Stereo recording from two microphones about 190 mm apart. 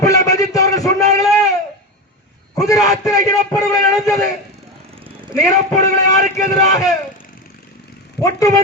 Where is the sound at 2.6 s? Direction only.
20° left (ahead or behind).